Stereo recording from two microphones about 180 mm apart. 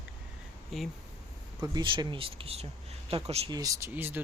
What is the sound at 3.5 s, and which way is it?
Speech, 20° right (ahead or behind).